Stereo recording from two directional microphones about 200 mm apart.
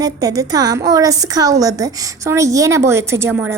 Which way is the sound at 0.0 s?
20° right (ahead or behind).